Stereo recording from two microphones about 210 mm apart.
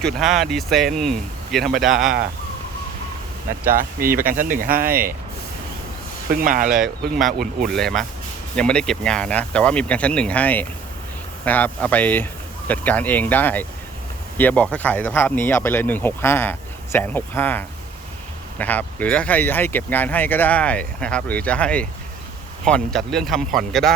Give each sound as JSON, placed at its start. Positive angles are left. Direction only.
{"t": 0.0, "sound": "speech", "side_deg": 0}
{"t": 3.7, "sound": "speech", "side_deg": -45}
{"t": 6.3, "sound": "speech", "side_deg": -40}
{"t": 7.7, "sound": "speech", "side_deg": 0}